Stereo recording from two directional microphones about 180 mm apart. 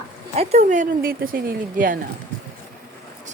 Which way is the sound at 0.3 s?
40° right (ahead or behind).